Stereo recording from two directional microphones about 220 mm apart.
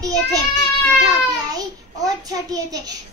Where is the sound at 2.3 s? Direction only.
15° right (ahead or behind).